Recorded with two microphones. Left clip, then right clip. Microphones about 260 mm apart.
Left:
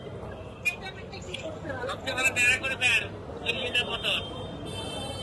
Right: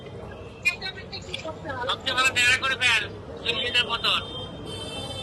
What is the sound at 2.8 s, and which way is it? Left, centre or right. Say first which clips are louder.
Speech: right 3 dB; right.